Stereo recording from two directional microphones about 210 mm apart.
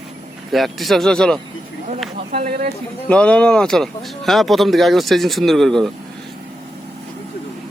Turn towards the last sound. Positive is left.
turn(degrees=0)  # may be behind; listen again after turning